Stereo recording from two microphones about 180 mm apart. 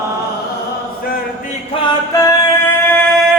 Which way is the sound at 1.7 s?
25° left (ahead or behind).